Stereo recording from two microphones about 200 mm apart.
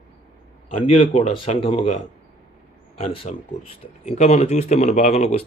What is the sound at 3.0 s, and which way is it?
Speech, 30° left (ahead or behind).